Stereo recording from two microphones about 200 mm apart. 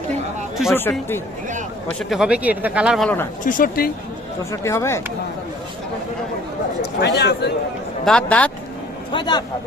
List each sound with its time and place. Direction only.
0.7 s speech: 10° left (ahead or behind)
1.9 s speech: centre (ahead or behind)
3.4 s speech: 45° left (ahead or behind)
4.5 s speech: 15° left (ahead or behind)
7.0 s speech: 55° left (ahead or behind)
8.0 s speech: 5° left (ahead or behind)
9.1 s speech: 20° left (ahead or behind)